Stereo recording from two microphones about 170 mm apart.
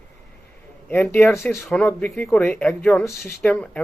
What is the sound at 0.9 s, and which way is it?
Speech, 10° left (ahead or behind).